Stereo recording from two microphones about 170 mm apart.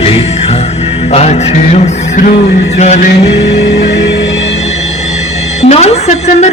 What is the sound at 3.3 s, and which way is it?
Music, 90° left.